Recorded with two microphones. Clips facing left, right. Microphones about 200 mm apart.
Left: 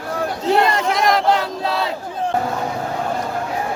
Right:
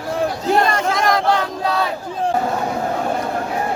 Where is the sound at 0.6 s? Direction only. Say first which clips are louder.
Even; 20° left (ahead or behind).